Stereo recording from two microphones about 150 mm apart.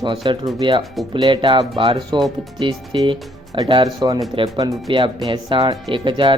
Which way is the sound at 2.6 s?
30° right (ahead or behind).